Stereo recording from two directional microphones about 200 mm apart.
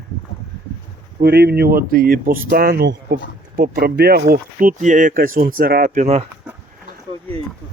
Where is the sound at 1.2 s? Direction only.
55° right (ahead or behind); by 6.2 s 35° right (ahead or behind).